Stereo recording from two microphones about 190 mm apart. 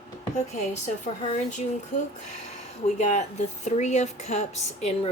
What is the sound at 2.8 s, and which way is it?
A woman's voice, 40° left (ahead or behind).